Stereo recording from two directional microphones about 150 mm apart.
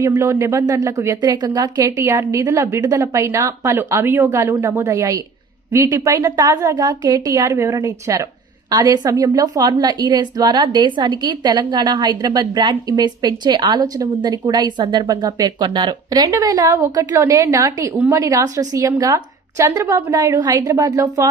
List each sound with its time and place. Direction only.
0.0 s a woman's voice: 20° right (ahead or behind)